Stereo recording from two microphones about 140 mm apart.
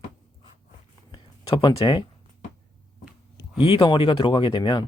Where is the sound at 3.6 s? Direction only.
35° left (ahead or behind).